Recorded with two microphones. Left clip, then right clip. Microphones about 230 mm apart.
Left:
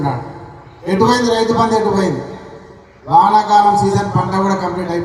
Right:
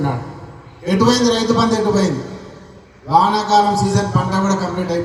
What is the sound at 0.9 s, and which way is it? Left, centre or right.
A man's voice, right.